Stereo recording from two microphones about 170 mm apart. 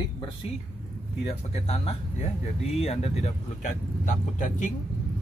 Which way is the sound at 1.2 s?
35° left (ahead or behind).